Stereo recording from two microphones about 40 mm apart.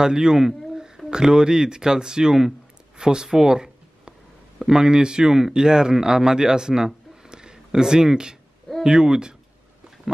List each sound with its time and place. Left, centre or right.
0.0 s speech: centre
7.2 s a sound: centre
8.8 s speech: centre